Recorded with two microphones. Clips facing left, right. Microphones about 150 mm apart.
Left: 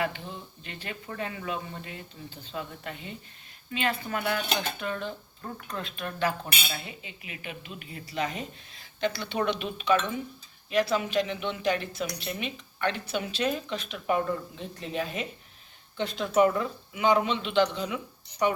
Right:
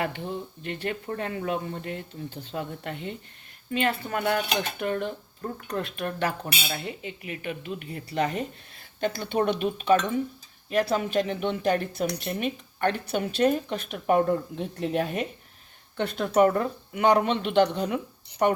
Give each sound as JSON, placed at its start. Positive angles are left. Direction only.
{"t": 0.6, "sound": "a woman's voice", "side_deg": -60}